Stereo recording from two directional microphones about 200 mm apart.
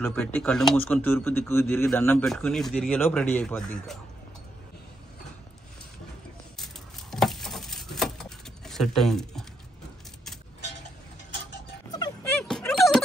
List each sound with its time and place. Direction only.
0.0 s speech: 10° left (ahead or behind)
6.6 s a sound: centre (ahead or behind)
11.9 s music: 20° left (ahead or behind)
12.4 s music: centre (ahead or behind)